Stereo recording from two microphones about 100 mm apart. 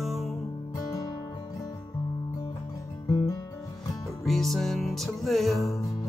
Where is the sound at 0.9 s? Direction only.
40° left (ahead or behind).